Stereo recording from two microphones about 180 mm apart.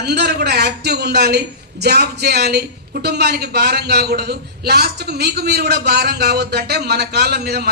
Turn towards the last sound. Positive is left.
turn(degrees=-65)  # may be behind; listen again after turning